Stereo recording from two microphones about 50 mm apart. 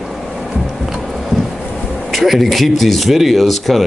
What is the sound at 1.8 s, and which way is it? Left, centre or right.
A man's voice, centre.